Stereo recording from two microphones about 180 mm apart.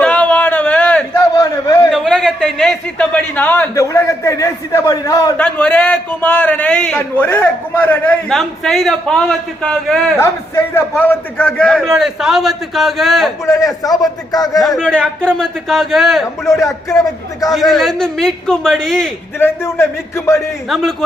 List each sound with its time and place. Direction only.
0.0 s a sound: 5° left (ahead or behind)
1.4 s a sound: 20° left (ahead or behind)
1.9 s a man's voice: 5° left (ahead or behind); by 5.3 s 20° left (ahead or behind)
5.4 s a man's voice: 5° left (ahead or behind)
10.2 s a man's voice: 15° left (ahead or behind)
13.4 s a man's voice: 15° left (ahead or behind)
14.8 s a man's voice: 5° left (ahead or behind)
16.5 s a man's voice: 15° left (ahead or behind)
17.5 s a man's voice: centre (ahead or behind)
19.4 s a man's voice: 10° left (ahead or behind)
20.7 s a man's voice: centre (ahead or behind)